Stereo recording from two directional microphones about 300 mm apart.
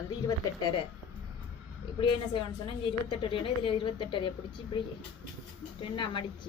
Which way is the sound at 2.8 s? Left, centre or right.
Centre.